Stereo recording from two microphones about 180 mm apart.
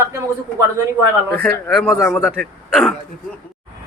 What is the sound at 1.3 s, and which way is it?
Speech, centre (ahead or behind).